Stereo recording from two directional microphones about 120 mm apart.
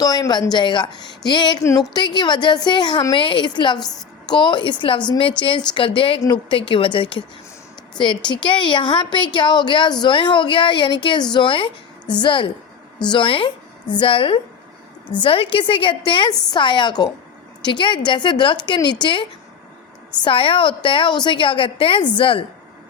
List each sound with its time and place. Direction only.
0.0 s a woman's voice: 30° left (ahead or behind); by 22.4 s 45° left (ahead or behind)